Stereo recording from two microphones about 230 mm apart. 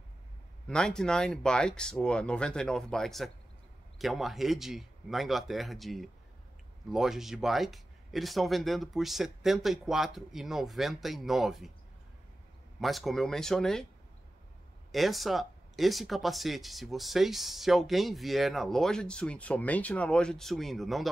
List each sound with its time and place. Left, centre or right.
0.7 s speech: centre
12.8 s speech: centre
14.9 s speech: centre